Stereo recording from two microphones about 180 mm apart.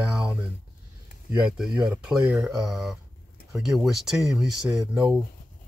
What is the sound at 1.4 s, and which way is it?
Speech, 5° right (ahead or behind).